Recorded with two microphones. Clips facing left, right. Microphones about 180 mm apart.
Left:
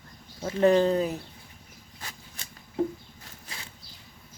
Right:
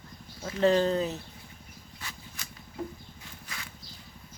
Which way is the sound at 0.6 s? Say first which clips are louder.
Left 3 dB; 15° left (ahead or behind).